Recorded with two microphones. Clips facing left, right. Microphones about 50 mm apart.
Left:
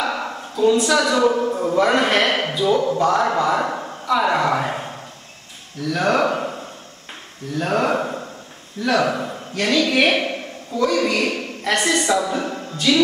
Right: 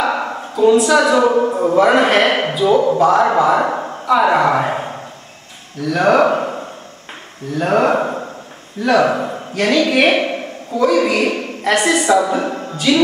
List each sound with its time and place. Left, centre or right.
0.0 s a woman's voice: centre
1.8 s a man's voice: centre
3.7 s a sound: centre
4.1 s a man's voice: centre
8.0 s a sound: centre
8.8 s speech: centre
9.1 s a man's voice: centre
12.7 s speech: centre